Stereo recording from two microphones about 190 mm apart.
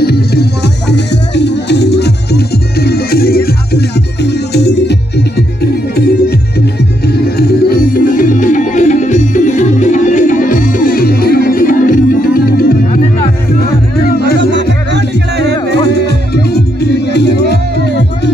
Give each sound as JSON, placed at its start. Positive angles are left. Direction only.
{"t": 0.0, "sound": "music", "side_deg": 55}
{"t": 14.5, "sound": "music", "side_deg": -65}
{"t": 16.1, "sound": "music", "side_deg": 60}